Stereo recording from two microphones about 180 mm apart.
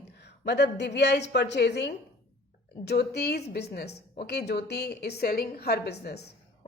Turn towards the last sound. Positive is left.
turn(degrees=65)  # may be behind; listen again after turning